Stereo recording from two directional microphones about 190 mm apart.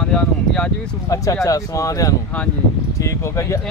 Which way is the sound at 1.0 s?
15° left (ahead or behind).